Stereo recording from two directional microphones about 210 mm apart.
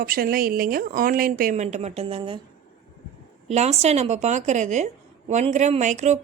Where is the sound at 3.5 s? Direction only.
30° right (ahead or behind).